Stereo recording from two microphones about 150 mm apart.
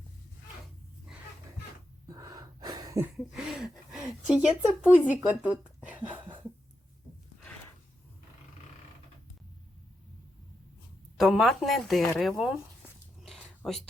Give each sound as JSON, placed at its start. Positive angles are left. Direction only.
{"t": 2.0, "sound": "gasp", "side_deg": -25}
{"t": 3.3, "sound": "a sound", "side_deg": 0}
{"t": 4.4, "sound": "speech", "side_deg": -10}
{"t": 5.3, "sound": "a sound", "side_deg": -10}
{"t": 11.2, "sound": "speech", "side_deg": 0}
{"t": 13.6, "sound": "speech", "side_deg": 5}